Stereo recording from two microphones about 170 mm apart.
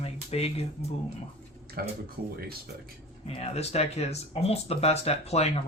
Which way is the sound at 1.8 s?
60° right (ahead or behind).